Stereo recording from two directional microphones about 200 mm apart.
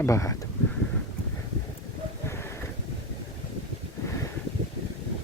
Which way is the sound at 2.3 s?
10° left (ahead or behind).